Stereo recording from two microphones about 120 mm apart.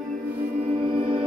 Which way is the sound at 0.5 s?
55° right (ahead or behind).